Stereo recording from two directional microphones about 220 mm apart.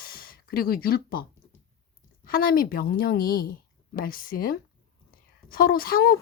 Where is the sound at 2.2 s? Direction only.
40° left (ahead or behind).